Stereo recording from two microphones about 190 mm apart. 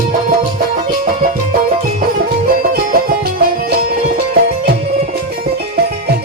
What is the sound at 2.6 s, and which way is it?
Music, 50° right (ahead or behind).